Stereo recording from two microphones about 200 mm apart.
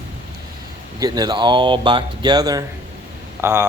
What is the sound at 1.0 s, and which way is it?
Speech, 20° right (ahead or behind).